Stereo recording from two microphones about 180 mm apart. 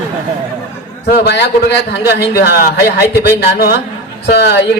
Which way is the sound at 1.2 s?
65° left (ahead or behind).